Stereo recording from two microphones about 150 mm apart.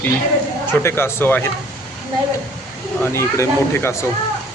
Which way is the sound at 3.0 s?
15° left (ahead or behind).